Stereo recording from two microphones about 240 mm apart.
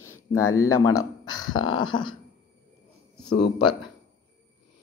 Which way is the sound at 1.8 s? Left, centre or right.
Centre.